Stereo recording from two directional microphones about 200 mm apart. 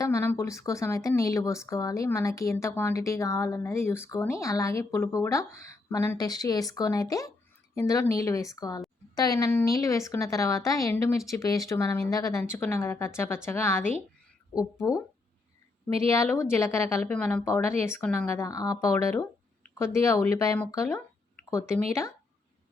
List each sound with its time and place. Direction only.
0.0 s speech: 15° left (ahead or behind)
16.0 s speech: 15° left (ahead or behind)